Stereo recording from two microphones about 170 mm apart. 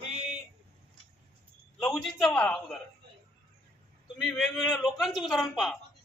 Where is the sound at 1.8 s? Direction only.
Centre (ahead or behind).